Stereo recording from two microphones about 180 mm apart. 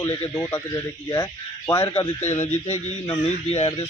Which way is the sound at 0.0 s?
20° left (ahead or behind).